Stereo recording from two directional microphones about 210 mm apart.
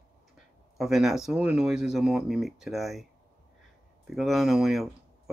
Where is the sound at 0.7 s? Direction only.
Centre (ahead or behind).